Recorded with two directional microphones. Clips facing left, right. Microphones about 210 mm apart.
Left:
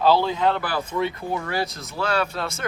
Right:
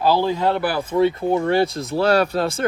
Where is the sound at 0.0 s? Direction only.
15° right (ahead or behind).